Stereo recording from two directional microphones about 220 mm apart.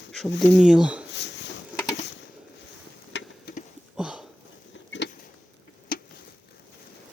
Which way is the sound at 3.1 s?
55° left (ahead or behind).